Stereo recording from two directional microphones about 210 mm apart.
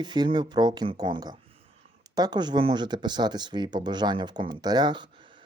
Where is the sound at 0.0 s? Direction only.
20° right (ahead or behind).